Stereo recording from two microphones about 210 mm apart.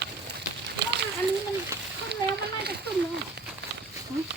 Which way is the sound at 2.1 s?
50° right (ahead or behind).